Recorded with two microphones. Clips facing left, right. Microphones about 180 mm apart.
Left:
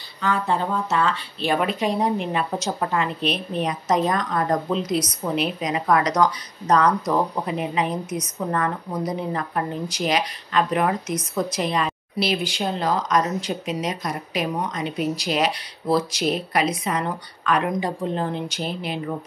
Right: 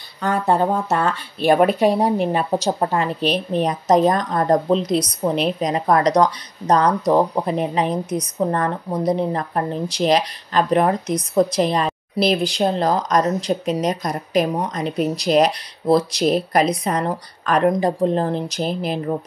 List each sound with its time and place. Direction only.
0.2 s speech: 50° right (ahead or behind)